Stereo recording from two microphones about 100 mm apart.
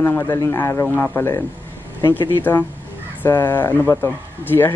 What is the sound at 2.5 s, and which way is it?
Speech, 20° left (ahead or behind).